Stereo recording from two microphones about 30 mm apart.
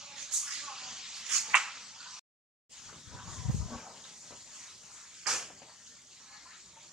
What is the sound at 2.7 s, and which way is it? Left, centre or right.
Dog, centre.